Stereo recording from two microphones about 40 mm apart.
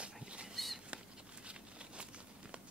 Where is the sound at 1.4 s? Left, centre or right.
Right.